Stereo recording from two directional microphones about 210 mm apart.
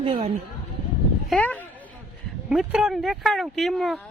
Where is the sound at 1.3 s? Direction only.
5° left (ahead or behind).